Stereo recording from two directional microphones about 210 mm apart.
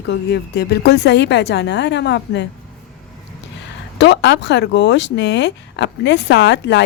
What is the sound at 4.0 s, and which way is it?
Speech, 55° left (ahead or behind).